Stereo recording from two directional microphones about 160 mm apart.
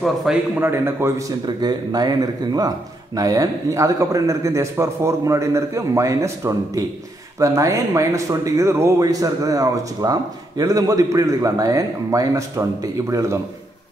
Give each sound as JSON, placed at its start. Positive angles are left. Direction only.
{"t": 0.0, "sound": "a man's voice", "side_deg": 0}
{"t": 0.6, "sound": "a man's voice", "side_deg": -15}